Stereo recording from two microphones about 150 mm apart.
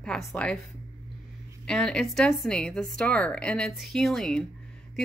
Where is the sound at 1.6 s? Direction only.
5° left (ahead or behind).